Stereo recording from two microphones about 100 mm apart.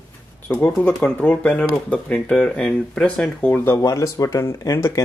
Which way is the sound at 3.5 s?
20° left (ahead or behind).